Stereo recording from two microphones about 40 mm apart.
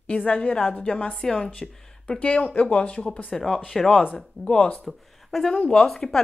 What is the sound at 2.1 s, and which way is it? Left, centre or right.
Speech, left.